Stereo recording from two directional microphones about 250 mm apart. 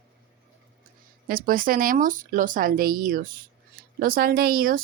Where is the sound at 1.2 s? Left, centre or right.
Right.